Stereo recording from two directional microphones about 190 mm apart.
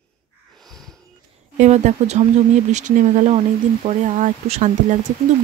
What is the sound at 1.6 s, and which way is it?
Speech, 35° right (ahead or behind).